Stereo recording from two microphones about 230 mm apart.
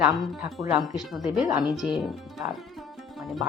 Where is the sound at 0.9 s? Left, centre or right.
Centre.